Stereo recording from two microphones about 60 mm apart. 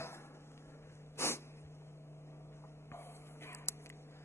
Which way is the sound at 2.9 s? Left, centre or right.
Left.